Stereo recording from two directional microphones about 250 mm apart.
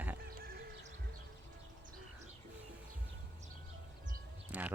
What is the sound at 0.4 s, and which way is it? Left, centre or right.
Music, right.